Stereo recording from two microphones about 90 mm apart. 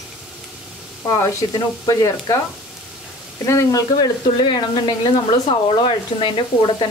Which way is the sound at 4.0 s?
55° left (ahead or behind).